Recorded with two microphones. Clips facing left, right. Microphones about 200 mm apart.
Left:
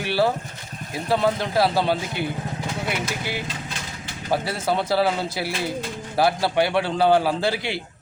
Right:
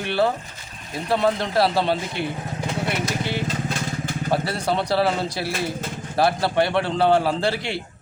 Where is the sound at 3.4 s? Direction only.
45° right (ahead or behind).